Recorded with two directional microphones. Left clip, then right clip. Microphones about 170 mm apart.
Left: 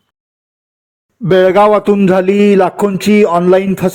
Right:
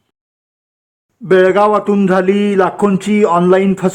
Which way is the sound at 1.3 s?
45° left (ahead or behind).